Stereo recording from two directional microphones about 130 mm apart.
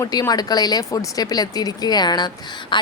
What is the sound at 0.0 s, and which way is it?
A woman's voice, 30° left (ahead or behind).